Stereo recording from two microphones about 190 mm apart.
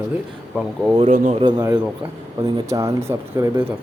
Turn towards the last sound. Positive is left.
turn(degrees=-15)  # may be behind; listen again after turning